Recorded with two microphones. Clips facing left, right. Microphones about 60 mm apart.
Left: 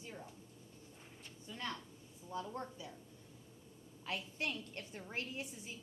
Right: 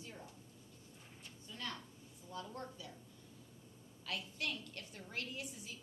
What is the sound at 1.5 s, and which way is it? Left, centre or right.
A woman's voice, left.